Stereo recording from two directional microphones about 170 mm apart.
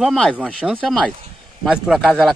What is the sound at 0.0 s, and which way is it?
A man's voice, centre (ahead or behind).